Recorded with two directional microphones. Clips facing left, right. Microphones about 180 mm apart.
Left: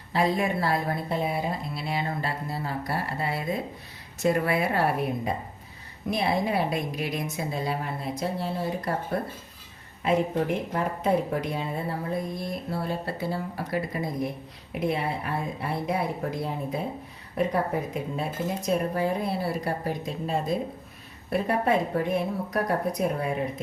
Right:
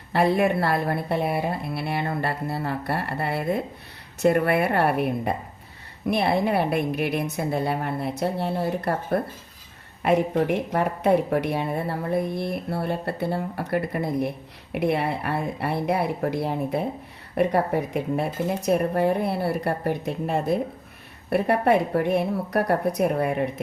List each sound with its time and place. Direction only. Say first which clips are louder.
0.1 s speech: right 4 dB; 60° right (ahead or behind)
10.0 s speech: right 3 dB; 65° right (ahead or behind)